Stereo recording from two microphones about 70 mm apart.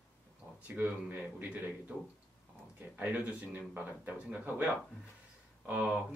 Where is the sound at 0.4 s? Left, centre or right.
Left.